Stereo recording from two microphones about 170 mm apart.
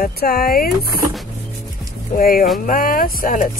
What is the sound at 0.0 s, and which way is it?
Speech, 60° left (ahead or behind).